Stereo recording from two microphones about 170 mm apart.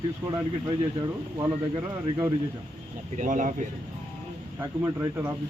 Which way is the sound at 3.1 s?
50° right (ahead or behind).